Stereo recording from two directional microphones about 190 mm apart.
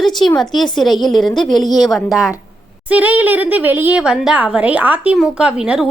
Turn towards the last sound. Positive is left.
turn(degrees=-5)  # may be behind; listen again after turning